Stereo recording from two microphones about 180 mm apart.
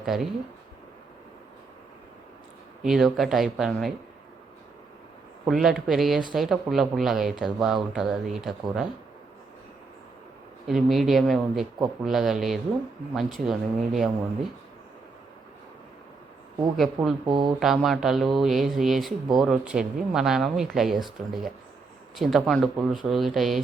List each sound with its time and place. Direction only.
0.0 s speech: centre (ahead or behind)
2.8 s speech: centre (ahead or behind)
5.5 s speech: centre (ahead or behind)
10.7 s speech: centre (ahead or behind)
16.7 s speech: centre (ahead or behind)
17.2 s speech: 25° right (ahead or behind)
17.6 s speech: centre (ahead or behind)